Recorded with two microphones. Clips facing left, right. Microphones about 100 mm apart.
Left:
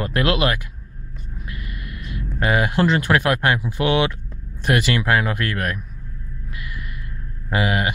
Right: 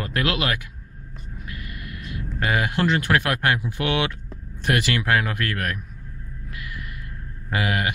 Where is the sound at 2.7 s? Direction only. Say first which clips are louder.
Left 3 dB; 30° left (ahead or behind).